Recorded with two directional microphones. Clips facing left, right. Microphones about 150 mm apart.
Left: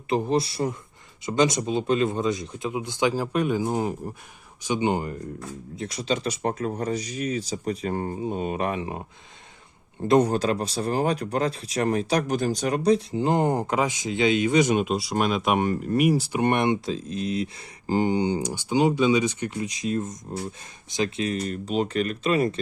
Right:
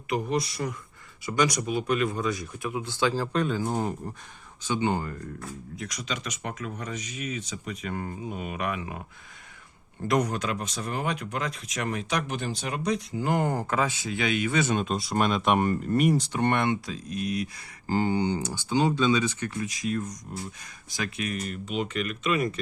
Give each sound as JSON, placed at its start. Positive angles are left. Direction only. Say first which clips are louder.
{"t": 0.1, "sound": "speech", "louder": "left 4 dB", "side_deg": 30}
{"t": 10.1, "sound": "speech", "louder": "left 6 dB", "side_deg": 30}